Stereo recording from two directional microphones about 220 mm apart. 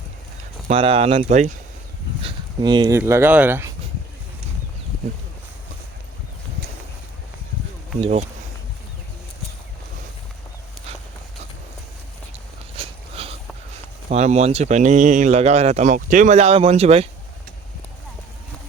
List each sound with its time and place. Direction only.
0.7 s speech: 25° right (ahead or behind)
2.2 s speech: 20° right (ahead or behind)
3.0 s speech: 10° right (ahead or behind)
8.0 s speech: 30° right (ahead or behind)
12.7 s a sound: 25° right (ahead or behind)
14.1 s speech: 30° right (ahead or behind)